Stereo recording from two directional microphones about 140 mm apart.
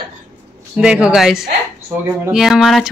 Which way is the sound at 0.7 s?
5° right (ahead or behind).